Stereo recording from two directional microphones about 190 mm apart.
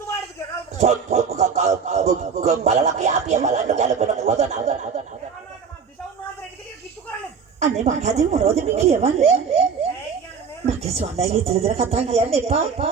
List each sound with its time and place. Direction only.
0.8 s music: 35° right (ahead or behind)
7.6 s music: 35° right (ahead or behind)